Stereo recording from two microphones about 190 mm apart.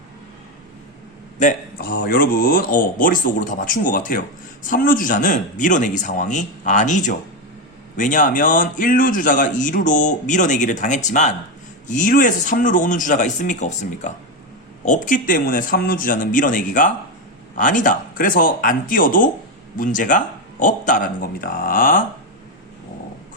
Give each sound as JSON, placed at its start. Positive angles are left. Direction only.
{"t": 1.4, "sound": "a man's voice", "side_deg": 45}
{"t": 1.9, "sound": "a man's voice", "side_deg": 55}